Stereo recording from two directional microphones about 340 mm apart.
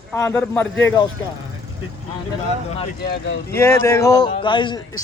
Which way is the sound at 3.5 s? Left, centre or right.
Centre.